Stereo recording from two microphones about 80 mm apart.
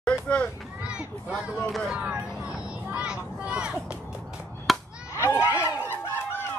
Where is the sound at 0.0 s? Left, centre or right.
Centre.